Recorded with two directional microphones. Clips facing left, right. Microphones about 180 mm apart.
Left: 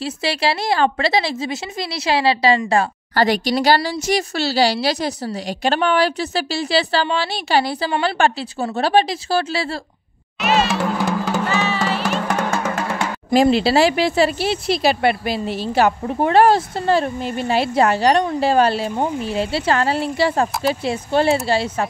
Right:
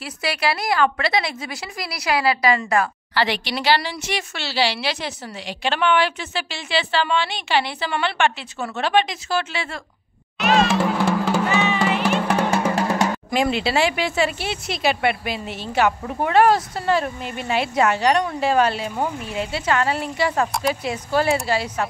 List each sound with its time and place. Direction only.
0.0 s a woman's voice: 30° left (ahead or behind)
3.2 s a woman's voice: 45° left (ahead or behind)
10.4 s music: centre (ahead or behind)
11.4 s music: 15° right (ahead or behind)
13.3 s speech: 35° left (ahead or behind)